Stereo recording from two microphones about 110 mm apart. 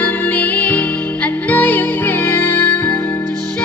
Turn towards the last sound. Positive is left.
turn(degrees=15)  # may be behind; listen again after turning